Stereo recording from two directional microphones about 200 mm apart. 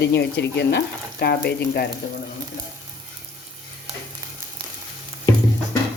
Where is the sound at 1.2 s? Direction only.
55° left (ahead or behind).